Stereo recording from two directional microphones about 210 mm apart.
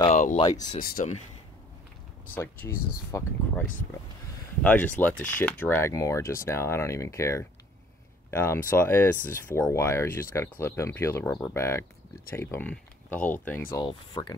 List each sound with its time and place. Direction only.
0.1 s a sound: 35° left (ahead or behind)
0.4 s speech: 20° left (ahead or behind)
0.7 s speech: 45° left (ahead or behind)
2.3 s speech: 10° left (ahead or behind)
4.6 s speech: 5° left (ahead or behind)